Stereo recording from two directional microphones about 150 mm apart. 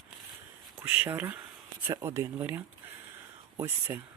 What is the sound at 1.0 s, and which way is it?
Speech, 15° right (ahead or behind).